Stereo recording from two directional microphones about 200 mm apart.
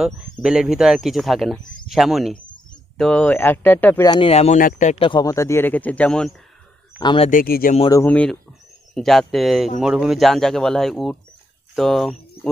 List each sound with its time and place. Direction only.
0.0 s speech: 5° right (ahead or behind); by 4.3 s 20° left (ahead or behind)
4.3 s speech: 35° left (ahead or behind); by 6.3 s 5° left (ahead or behind)
7.0 s speech: 20° left (ahead or behind)
7.2 s speech: 45° left (ahead or behind)
7.9 s speech: 10° left (ahead or behind)